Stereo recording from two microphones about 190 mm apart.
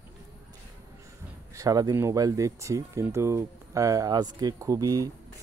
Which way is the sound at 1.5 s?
20° right (ahead or behind).